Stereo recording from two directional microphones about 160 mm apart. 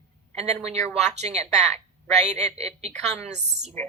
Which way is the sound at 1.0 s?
45° right (ahead or behind).